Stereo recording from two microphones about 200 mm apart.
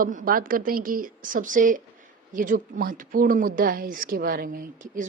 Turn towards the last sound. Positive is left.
turn(degrees=-40)  # may be behind; listen again after turning